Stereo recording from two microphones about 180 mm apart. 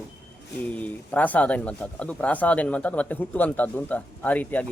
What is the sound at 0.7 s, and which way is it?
Speech, 10° left (ahead or behind).